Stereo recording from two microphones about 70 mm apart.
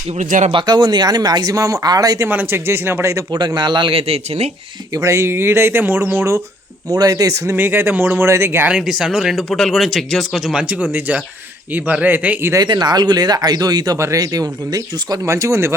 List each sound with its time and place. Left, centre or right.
0.7 s speech: right
2.3 s speech: right
3.3 s speech: right
4.9 s speech: right
6.9 s speech: right
7.5 s speech: right
8.7 s speech: centre
9.5 s speech: centre; by 12.4 s right
12.5 s speech: right
14.0 s speech: right
15.3 s speech: right